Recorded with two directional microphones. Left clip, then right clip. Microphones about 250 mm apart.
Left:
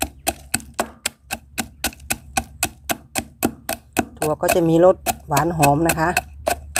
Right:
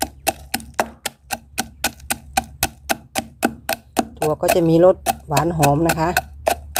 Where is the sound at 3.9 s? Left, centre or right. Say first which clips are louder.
Right 1 dB; centre.